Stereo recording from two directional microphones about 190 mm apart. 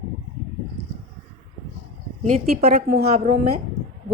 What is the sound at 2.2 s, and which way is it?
Speech, 40° right (ahead or behind).